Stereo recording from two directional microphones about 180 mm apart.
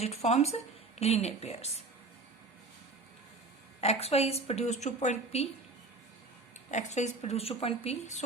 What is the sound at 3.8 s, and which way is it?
A woman's voice, 35° left (ahead or behind).